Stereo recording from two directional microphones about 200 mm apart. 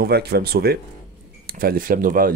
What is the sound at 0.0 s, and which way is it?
Speech, 55° right (ahead or behind).